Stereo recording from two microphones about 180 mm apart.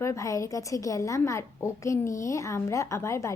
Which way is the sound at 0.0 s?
15° left (ahead or behind).